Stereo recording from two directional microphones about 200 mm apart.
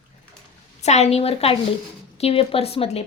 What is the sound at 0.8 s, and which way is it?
A woman's voice, 35° left (ahead or behind).